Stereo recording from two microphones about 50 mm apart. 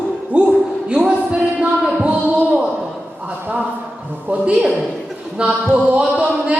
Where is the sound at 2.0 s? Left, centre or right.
Right.